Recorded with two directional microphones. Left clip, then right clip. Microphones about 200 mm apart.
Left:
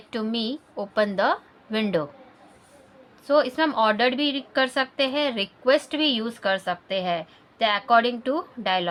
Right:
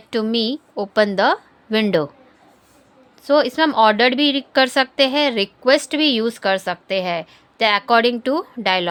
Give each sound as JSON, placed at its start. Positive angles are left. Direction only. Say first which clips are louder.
{"t": 0.1, "sound": "a woman's voice", "louder": "right 8 dB", "side_deg": -40}
{"t": 3.2, "sound": "a woman's voice", "louder": "right 5 dB", "side_deg": -40}